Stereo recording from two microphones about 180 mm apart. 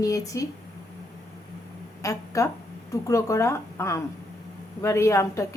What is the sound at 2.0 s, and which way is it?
A woman's voice, 15° left (ahead or behind).